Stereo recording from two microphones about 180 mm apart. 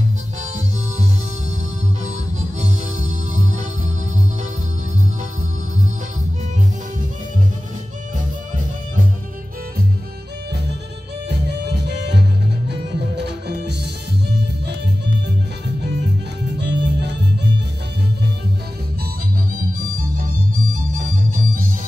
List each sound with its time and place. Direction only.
2.6 s music: 45° right (ahead or behind)
11.2 s music: 65° right (ahead or behind)
16.5 s music: 70° right (ahead or behind)